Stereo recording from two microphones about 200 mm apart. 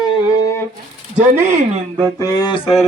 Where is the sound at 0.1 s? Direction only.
15° left (ahead or behind).